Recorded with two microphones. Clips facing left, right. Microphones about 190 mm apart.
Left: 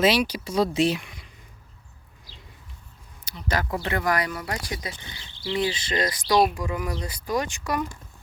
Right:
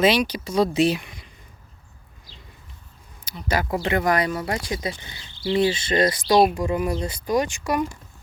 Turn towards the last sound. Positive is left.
turn(degrees=-15)  # may be behind; listen again after turning